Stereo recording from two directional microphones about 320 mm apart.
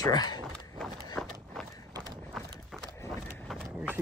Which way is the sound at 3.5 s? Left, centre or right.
Centre.